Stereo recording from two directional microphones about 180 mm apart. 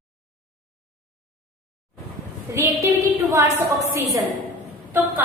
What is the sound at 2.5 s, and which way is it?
A woman's voice, 15° right (ahead or behind).